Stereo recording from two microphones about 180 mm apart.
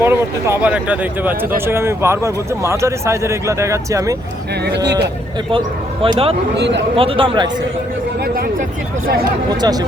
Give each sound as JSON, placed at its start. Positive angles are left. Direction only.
{"t": 0.0, "sound": "speech", "side_deg": -15}
{"t": 4.6, "sound": "speech", "side_deg": -70}
{"t": 5.5, "sound": "speech", "side_deg": -30}
{"t": 6.6, "sound": "speech", "side_deg": -75}
{"t": 6.9, "sound": "speech", "side_deg": -30}
{"t": 9.6, "sound": "speech", "side_deg": -20}